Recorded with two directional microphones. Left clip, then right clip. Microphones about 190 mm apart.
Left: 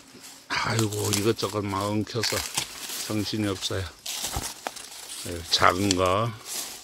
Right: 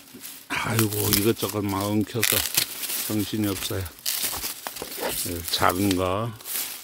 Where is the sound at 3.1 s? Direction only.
15° right (ahead or behind).